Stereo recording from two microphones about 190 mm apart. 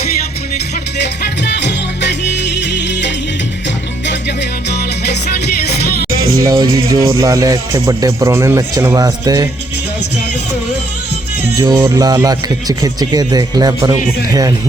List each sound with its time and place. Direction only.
1.0 s music: 65° left (ahead or behind)
5.8 s music: 75° left (ahead or behind)
6.4 s music: 15° right (ahead or behind)
6.9 s a man's voice: 15° right (ahead or behind)
11.8 s speech: 20° right (ahead or behind)